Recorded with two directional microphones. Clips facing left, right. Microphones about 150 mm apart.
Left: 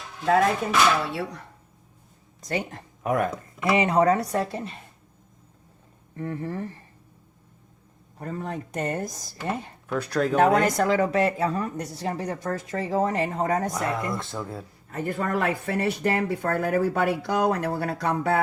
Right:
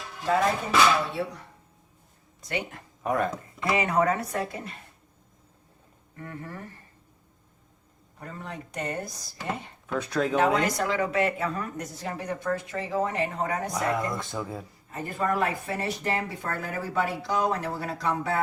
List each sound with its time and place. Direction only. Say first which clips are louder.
2.4 s speech: left 3 dB; 40° left (ahead or behind)
3.0 s speech: left 2 dB; 5° left (ahead or behind)
3.6 s speech: left 4 dB; 25° left (ahead or behind)
6.1 s speech: left 8 dB; 30° left (ahead or behind)
8.2 s speech: left 7 dB; 45° left (ahead or behind)
9.8 s speech: left 2 dB; 5° left (ahead or behind)
10.3 s speech: left 5 dB; 50° left (ahead or behind)
13.7 s speech: even; centre (ahead or behind)
14.9 s speech: left 1 dB; 60° left (ahead or behind)